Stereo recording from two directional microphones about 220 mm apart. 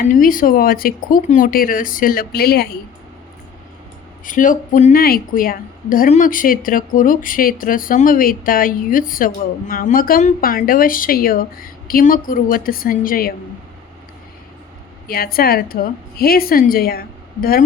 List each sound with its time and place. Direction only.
0.1 s a woman's voice: 40° left (ahead or behind)
4.3 s a woman's voice: 35° left (ahead or behind)
15.0 s a woman's voice: 45° left (ahead or behind)